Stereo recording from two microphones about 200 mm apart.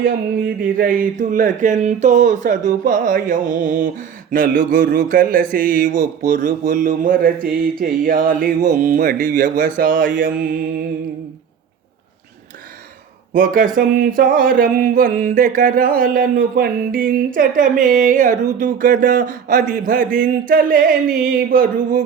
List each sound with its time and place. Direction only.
0.0 s a sound: 45° right (ahead or behind)
4.9 s mantra: 45° right (ahead or behind)
13.3 s mantra: 45° right (ahead or behind)